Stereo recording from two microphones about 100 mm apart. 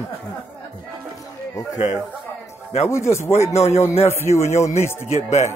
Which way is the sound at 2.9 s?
30° left (ahead or behind).